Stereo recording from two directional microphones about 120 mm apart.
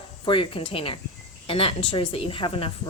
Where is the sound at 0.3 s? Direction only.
45° left (ahead or behind).